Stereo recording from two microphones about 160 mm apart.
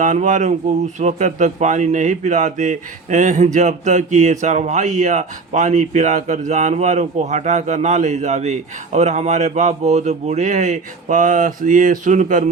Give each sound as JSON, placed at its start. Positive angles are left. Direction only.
{"t": 0.0, "sound": "speech", "side_deg": -50}